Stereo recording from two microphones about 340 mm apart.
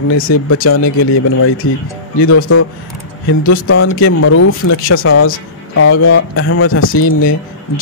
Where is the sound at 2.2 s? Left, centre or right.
Left.